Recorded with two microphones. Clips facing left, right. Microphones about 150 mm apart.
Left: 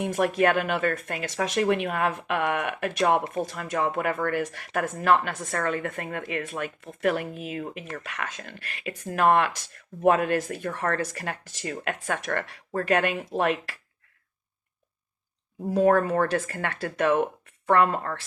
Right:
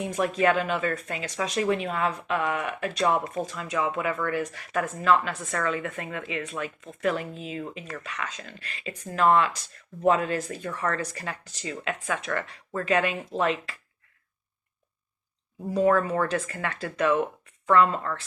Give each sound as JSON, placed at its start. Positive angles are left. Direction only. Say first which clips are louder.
{"t": 0.0, "sound": "speech", "louder": "left 1 dB", "side_deg": 55}
{"t": 4.3, "sound": "speech", "louder": "left 1 dB", "side_deg": 60}
{"t": 15.7, "sound": "speech", "louder": "left 2 dB", "side_deg": 50}